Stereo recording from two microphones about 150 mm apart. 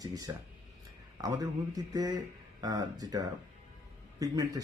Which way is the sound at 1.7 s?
25° right (ahead or behind).